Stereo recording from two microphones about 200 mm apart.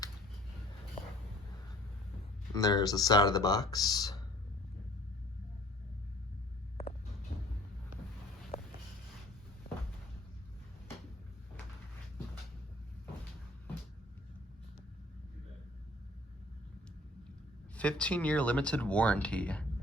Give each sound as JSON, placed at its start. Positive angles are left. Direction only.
{"t": 2.6, "sound": "speech", "side_deg": 20}
{"t": 8.5, "sound": "a sound", "side_deg": 30}
{"t": 17.7, "sound": "speech", "side_deg": 5}